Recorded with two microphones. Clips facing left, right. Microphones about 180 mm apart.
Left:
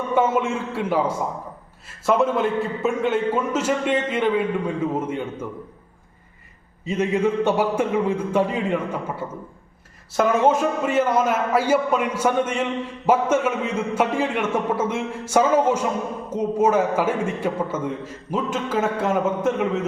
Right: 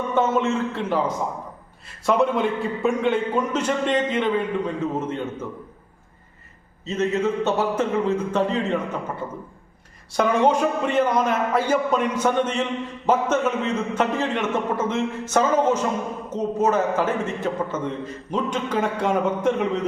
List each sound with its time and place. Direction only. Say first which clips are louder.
0.1 s a man's voice: left 1 dB; 10° left (ahead or behind)
6.8 s a man's voice: left 1 dB; 10° left (ahead or behind)